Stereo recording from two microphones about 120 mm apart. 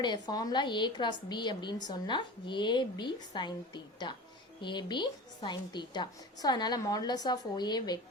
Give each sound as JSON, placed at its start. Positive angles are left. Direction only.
{"t": 0.0, "sound": "a woman's voice", "side_deg": 35}